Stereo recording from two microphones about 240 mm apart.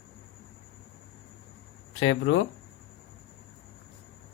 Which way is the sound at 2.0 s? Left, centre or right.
Left.